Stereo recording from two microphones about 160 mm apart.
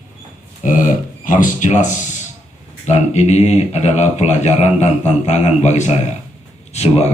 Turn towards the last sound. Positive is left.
turn(degrees=40)  # may be behind; listen again after turning